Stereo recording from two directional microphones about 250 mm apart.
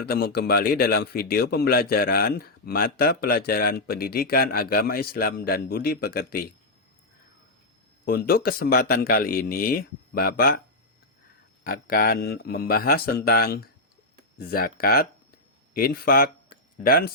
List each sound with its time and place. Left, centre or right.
0.0 s a man's voice: left
8.0 s a man's voice: left
11.6 s a man's voice: left